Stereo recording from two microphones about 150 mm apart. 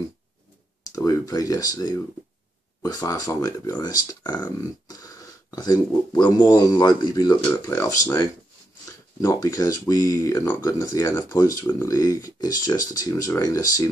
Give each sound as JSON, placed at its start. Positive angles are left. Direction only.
{"t": 0.9, "sound": "speech", "side_deg": 25}